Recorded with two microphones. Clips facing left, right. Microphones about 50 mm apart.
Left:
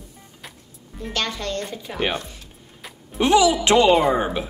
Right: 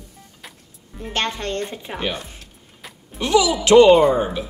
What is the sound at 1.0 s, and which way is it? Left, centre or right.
Speech, right.